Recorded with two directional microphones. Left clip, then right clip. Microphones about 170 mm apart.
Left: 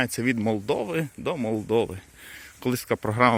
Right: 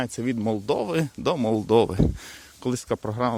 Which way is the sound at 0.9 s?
30° right (ahead or behind).